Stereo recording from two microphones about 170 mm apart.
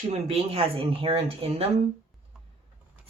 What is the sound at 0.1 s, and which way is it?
Speech, 35° right (ahead or behind).